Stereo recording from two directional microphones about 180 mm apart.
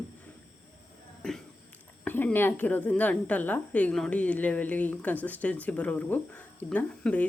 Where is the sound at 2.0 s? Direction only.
10° left (ahead or behind).